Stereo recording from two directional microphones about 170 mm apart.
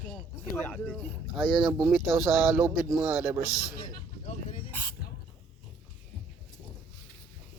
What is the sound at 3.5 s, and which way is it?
Speech, 20° left (ahead or behind).